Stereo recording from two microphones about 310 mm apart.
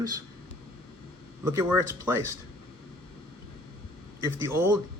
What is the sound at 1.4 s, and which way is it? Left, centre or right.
Speech, centre.